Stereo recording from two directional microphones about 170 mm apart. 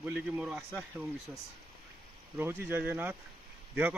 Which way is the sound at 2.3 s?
10° right (ahead or behind).